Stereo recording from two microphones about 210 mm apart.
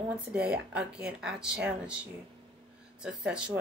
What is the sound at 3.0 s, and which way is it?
Speech, 5° right (ahead or behind).